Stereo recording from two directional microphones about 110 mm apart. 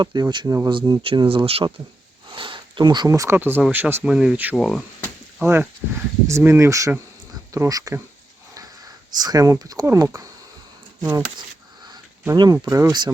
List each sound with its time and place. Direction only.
0.0 s speech: 40° right (ahead or behind)
2.3 s a sound: 50° right (ahead or behind)
3.1 s speech: 25° right (ahead or behind)
4.0 s speech: 5° right (ahead or behind)
5.4 s speech: 20° right (ahead or behind); by 13.1 s 35° right (ahead or behind)